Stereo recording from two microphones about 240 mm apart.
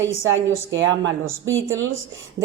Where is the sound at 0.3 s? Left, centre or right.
Right.